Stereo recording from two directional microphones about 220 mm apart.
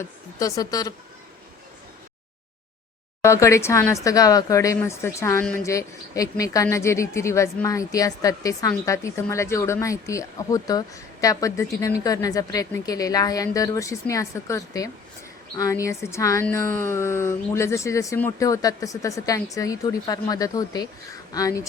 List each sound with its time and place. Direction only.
0.0 s speech: 15° left (ahead or behind)
3.2 s speech: 15° left (ahead or behind)